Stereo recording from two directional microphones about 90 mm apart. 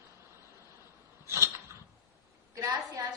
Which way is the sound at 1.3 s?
30° right (ahead or behind).